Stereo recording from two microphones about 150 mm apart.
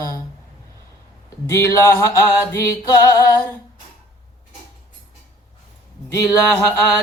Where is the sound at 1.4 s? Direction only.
20° left (ahead or behind).